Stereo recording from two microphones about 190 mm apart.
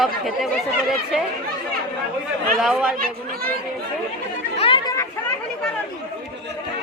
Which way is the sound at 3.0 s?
50° right (ahead or behind).